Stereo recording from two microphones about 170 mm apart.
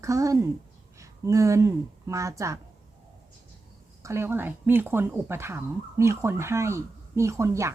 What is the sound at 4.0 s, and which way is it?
Speech, 15° right (ahead or behind).